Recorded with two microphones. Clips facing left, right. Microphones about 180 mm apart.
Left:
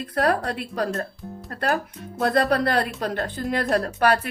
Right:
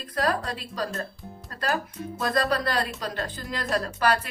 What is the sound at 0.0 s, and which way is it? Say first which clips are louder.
Speech: left 4 dB; 65° left (ahead or behind).